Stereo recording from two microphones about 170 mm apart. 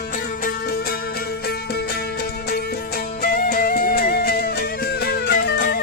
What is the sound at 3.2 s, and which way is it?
Music, 60° left (ahead or behind).